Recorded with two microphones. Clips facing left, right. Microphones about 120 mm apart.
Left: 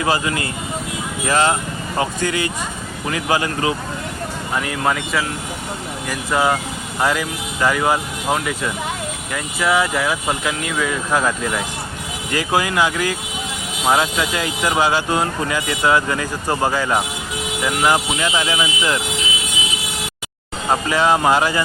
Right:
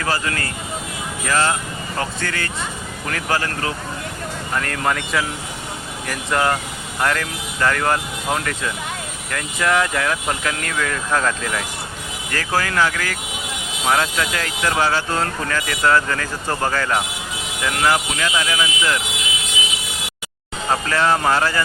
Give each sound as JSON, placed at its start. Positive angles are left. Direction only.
{"t": 0.0, "sound": "speech", "side_deg": 15}
{"t": 20.7, "sound": "speech", "side_deg": 15}